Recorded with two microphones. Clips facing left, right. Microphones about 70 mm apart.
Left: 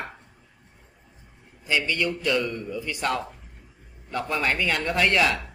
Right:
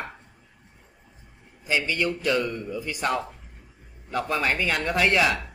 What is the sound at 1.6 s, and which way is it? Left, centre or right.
Speech, centre.